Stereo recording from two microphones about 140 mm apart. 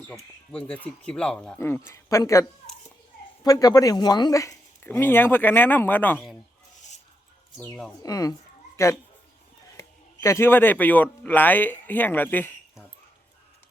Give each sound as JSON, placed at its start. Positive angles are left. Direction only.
{"t": 0.1, "sound": "speech", "side_deg": 10}
{"t": 1.5, "sound": "speech", "side_deg": 15}
{"t": 7.7, "sound": "speech", "side_deg": 5}
{"t": 8.0, "sound": "speech", "side_deg": 25}